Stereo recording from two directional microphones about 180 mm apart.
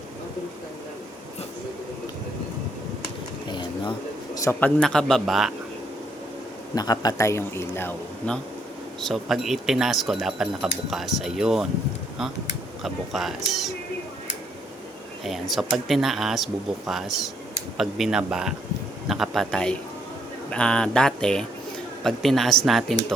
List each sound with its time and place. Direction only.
3.5 s a sound: 25° left (ahead or behind)
4.4 s speech: 15° left (ahead or behind)
4.8 s speech: 5° left (ahead or behind)
6.7 s a man's voice: 20° left (ahead or behind)
9.0 s speech: centre (ahead or behind)
12.8 s speech: centre (ahead or behind)
15.2 s speech: centre (ahead or behind)